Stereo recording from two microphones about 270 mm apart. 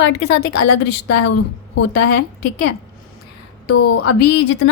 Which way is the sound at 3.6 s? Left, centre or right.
Left.